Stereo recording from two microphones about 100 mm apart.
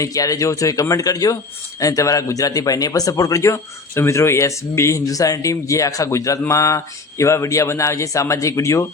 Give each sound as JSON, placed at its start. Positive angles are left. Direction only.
{"t": 0.0, "sound": "a man's voice", "side_deg": 35}